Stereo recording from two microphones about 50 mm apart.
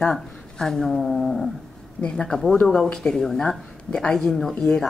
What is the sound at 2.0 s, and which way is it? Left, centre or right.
Speech, centre.